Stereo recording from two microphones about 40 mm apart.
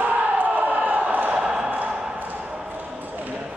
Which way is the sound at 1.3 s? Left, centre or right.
Centre.